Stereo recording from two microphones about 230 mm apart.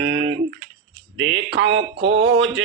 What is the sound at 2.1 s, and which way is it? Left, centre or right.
Mantra, right.